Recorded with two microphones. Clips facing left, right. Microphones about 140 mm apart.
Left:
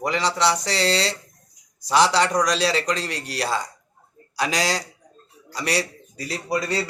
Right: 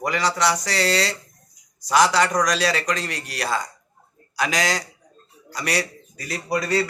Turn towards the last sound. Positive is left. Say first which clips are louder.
# right 2 dB
turn(degrees=30)  # may be behind; listen again after turning